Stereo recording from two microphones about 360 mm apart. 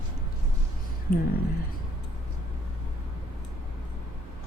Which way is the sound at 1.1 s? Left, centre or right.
Left.